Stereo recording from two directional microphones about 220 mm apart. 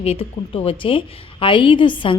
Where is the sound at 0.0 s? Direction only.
25° left (ahead or behind).